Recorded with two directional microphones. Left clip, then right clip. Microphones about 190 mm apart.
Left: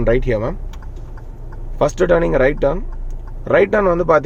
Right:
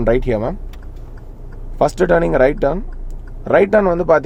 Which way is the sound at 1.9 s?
20° right (ahead or behind).